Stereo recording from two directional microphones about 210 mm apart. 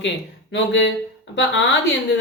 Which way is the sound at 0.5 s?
60° left (ahead or behind).